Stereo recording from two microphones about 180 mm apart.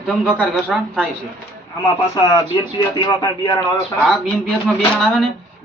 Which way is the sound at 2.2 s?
20° left (ahead or behind).